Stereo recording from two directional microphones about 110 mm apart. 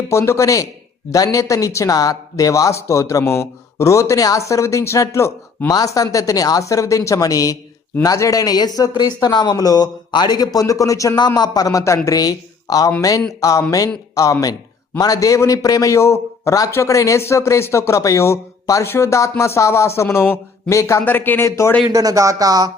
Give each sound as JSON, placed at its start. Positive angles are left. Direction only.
{"t": 0.1, "sound": "speech", "side_deg": 25}
{"t": 21.0, "sound": "speech", "side_deg": 15}
{"t": 21.8, "sound": "speech", "side_deg": -30}